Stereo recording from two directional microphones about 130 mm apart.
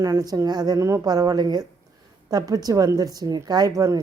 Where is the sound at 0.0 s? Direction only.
25° right (ahead or behind).